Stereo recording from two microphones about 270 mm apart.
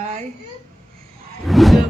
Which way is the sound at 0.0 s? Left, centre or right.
Right.